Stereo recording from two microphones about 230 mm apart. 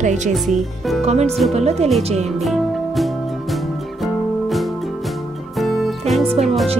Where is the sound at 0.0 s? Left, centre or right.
Right.